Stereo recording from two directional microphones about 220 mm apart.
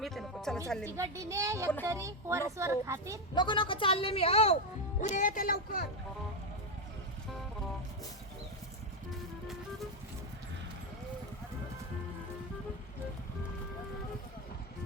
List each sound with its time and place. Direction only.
0.0 s music: centre (ahead or behind)
0.9 s a woman's voice: 15° right (ahead or behind)
3.3 s speech: 20° left (ahead or behind); by 5.9 s 40° left (ahead or behind)